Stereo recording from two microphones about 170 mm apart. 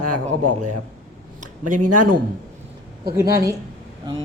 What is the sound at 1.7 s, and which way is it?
Speech, 50° right (ahead or behind).